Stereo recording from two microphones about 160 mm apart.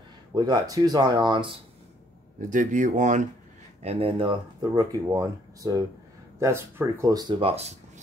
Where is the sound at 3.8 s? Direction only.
40° right (ahead or behind).